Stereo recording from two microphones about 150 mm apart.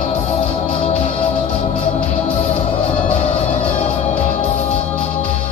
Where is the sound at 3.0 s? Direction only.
45° left (ahead or behind).